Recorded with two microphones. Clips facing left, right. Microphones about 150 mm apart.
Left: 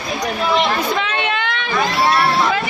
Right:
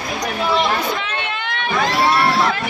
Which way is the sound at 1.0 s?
90° left.